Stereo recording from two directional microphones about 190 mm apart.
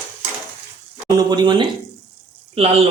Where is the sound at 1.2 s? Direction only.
20° right (ahead or behind).